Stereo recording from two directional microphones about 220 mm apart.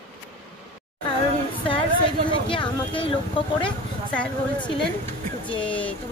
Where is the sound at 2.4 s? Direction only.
25° left (ahead or behind).